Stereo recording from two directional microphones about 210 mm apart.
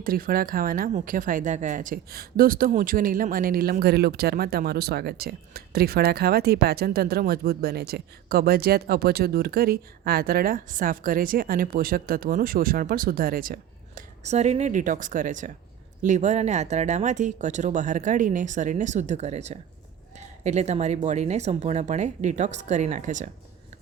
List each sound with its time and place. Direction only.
0.0 s speech: 45° right (ahead or behind)